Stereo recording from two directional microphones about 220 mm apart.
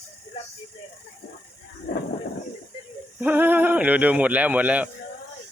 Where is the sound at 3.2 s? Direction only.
10° right (ahead or behind).